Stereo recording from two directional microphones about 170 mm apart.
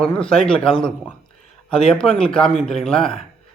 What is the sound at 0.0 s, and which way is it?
A man's voice, 5° left (ahead or behind).